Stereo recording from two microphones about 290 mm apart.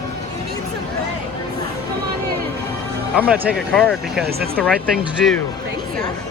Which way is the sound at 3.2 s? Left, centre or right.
Centre.